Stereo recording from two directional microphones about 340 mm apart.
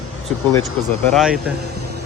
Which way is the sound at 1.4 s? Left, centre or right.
Right.